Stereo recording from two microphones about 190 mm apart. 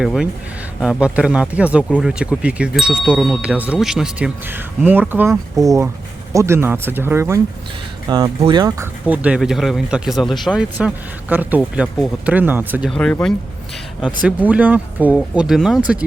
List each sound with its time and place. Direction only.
0.0 s speech: centre (ahead or behind); by 8.9 s 20° right (ahead or behind)
9.0 s speech: 5° right (ahead or behind)
12.9 s speech: 5° left (ahead or behind)
14.0 s speech: 5° right (ahead or behind)